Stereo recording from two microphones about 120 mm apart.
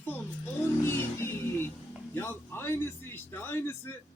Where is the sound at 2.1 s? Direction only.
20° left (ahead or behind).